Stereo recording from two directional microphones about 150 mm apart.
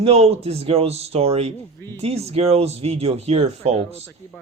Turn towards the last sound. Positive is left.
turn(degrees=-40)  # may be behind; listen again after turning